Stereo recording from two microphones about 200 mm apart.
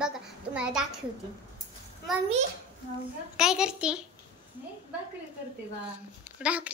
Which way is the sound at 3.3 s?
5° right (ahead or behind).